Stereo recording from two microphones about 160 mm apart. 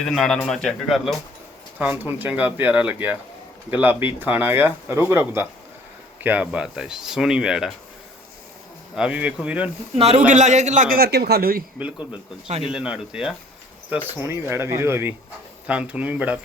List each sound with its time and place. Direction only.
0.0 s speech: 5° left (ahead or behind)
9.0 s speech: 5° right (ahead or behind)
9.9 s speech: 40° right (ahead or behind)
10.2 s a man's voice: 50° right (ahead or behind); by 11.6 s 70° right (ahead or behind)
11.8 s speech: 10° right (ahead or behind)
14.2 s speech: 15° right (ahead or behind)